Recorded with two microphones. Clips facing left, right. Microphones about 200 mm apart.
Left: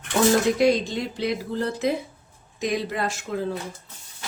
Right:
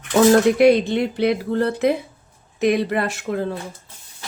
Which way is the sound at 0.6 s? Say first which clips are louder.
Right 6 dB; 60° right (ahead or behind).